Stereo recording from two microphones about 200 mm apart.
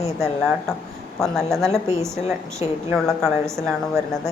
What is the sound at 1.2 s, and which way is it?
Speech, centre (ahead or behind).